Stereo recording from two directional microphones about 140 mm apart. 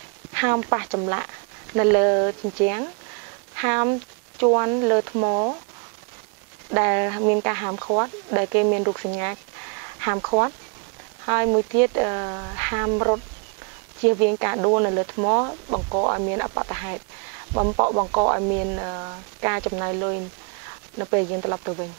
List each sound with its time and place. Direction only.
0.3 s speech: 20° right (ahead or behind)
4.4 s speech: 30° right (ahead or behind)
6.7 s speech: 20° right (ahead or behind)
10.0 s speech: 25° right (ahead or behind)
14.2 s speech: 20° right (ahead or behind)